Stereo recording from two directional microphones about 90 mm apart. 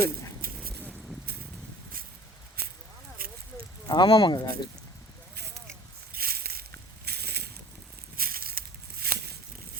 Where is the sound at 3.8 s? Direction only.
55° left (ahead or behind).